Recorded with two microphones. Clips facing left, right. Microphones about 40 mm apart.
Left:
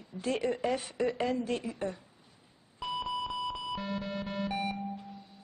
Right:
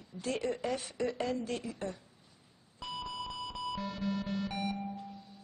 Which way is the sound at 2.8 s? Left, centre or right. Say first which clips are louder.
Left 6 dB; left.